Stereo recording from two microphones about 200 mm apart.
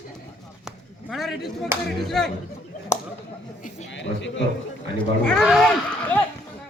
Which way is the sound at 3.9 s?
65° left (ahead or behind).